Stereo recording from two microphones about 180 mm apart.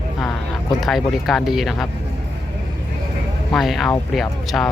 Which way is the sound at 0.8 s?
Centre (ahead or behind).